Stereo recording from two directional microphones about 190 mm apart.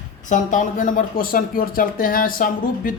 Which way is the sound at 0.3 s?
40° left (ahead or behind).